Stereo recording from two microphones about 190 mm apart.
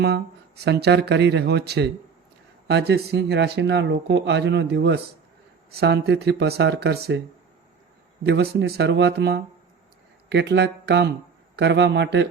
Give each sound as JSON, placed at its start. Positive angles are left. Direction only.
{"t": 0.6, "sound": "speech", "side_deg": -60}
{"t": 8.2, "sound": "speech", "side_deg": -60}